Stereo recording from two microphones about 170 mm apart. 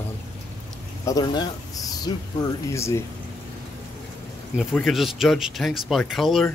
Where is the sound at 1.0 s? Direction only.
25° left (ahead or behind).